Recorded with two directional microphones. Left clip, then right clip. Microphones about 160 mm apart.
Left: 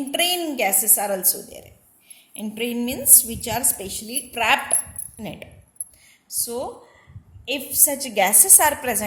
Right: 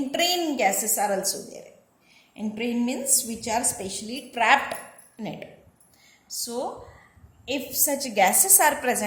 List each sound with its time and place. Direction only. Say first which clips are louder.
0.1 s a woman's voice: left 2 dB; 50° left (ahead or behind)